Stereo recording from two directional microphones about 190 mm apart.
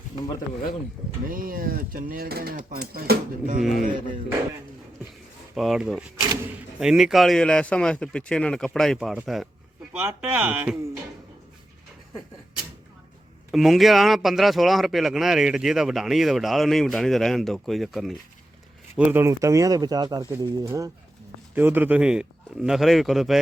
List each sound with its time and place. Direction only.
1.3 s speech: 50° right (ahead or behind)
3.6 s speech: centre (ahead or behind)
5.5 s speech: centre (ahead or behind)
13.5 s speech: centre (ahead or behind)